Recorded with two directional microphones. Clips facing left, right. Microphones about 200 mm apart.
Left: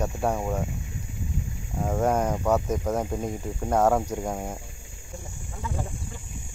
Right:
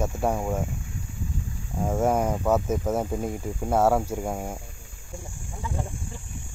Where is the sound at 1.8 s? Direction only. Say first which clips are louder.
Right 1 dB; 5° right (ahead or behind).